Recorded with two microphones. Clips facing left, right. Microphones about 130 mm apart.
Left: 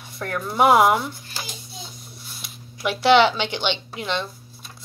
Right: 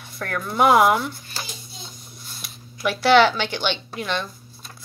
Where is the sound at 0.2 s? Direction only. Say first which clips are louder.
Even; 20° left (ahead or behind).